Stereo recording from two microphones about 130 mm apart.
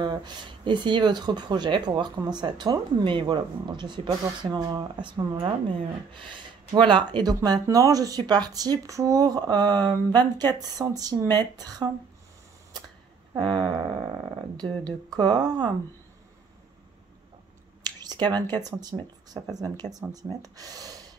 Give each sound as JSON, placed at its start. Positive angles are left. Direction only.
{"t": 0.0, "sound": "speech", "side_deg": -35}
{"t": 13.4, "sound": "speech", "side_deg": -35}
{"t": 17.8, "sound": "a sound", "side_deg": -35}
{"t": 18.6, "sound": "speech", "side_deg": -30}